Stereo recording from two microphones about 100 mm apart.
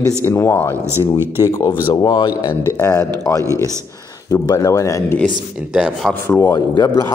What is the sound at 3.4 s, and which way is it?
Speech, 30° right (ahead or behind).